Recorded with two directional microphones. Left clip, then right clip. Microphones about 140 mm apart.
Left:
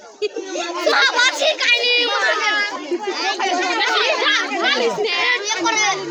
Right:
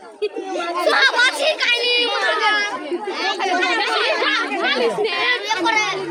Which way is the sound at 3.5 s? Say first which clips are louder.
Right 1 dB; 10° right (ahead or behind).